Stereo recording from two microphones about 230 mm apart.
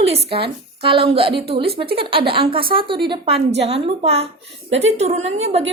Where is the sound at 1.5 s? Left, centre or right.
Right.